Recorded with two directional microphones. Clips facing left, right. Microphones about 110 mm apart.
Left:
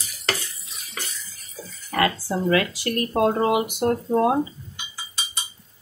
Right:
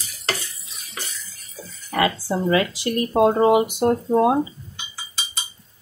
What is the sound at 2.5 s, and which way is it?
Speech, 25° right (ahead or behind).